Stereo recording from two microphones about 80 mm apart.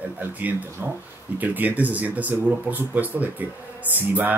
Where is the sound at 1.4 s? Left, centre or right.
Right.